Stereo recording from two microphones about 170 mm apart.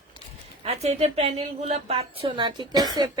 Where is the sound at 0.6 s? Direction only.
40° right (ahead or behind).